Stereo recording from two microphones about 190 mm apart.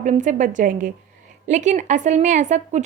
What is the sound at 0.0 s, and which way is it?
A woman's voice, 40° right (ahead or behind).